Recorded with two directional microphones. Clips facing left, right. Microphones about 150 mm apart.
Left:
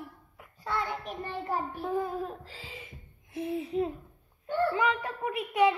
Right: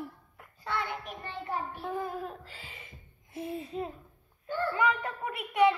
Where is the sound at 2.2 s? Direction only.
30° left (ahead or behind).